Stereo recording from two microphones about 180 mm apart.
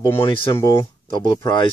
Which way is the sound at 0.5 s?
20° left (ahead or behind).